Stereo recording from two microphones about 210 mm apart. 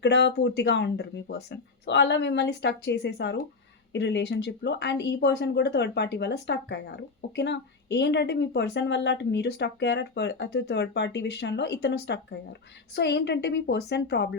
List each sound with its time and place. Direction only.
0.0 s a woman's voice: 55° left (ahead or behind)